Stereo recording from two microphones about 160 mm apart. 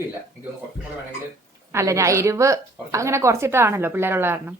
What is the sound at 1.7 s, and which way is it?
A woman's voice, 20° right (ahead or behind).